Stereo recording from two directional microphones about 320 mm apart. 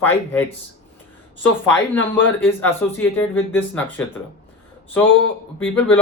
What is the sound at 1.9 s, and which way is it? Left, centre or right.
Speech, left.